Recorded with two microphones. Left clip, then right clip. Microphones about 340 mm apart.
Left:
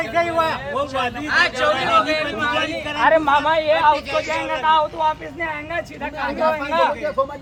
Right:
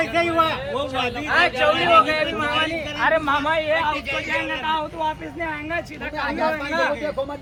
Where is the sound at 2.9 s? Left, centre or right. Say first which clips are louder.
Left 6 dB; left; by 5.8 s centre.